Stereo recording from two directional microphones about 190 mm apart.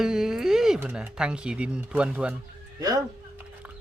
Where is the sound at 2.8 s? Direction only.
20° right (ahead or behind).